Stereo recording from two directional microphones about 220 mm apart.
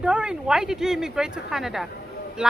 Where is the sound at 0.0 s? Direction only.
5° right (ahead or behind).